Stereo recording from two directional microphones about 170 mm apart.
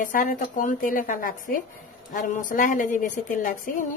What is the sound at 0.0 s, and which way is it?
A woman's voice, 50° left (ahead or behind).